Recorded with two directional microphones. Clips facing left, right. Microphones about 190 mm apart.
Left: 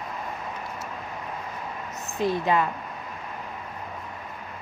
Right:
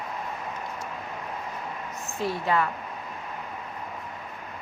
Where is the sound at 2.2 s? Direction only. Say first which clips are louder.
Left 3 dB; 20° left (ahead or behind).